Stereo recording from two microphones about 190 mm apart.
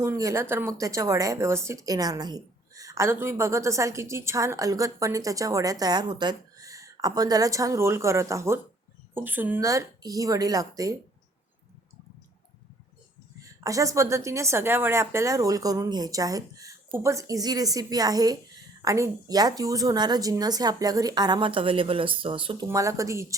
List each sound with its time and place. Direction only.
0.0 s speech: 15° right (ahead or behind)
13.4 s a woman's voice: 15° right (ahead or behind)
22.7 s speech: 15° right (ahead or behind)